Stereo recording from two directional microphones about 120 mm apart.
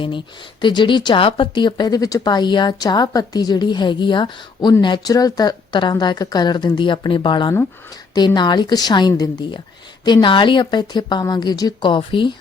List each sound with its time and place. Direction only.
0.6 s speech: 40° left (ahead or behind)